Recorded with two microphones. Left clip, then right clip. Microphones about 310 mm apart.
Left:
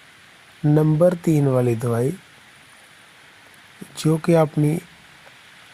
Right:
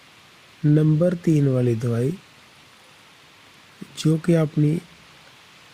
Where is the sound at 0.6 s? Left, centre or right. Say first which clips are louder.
Left 3 dB; left.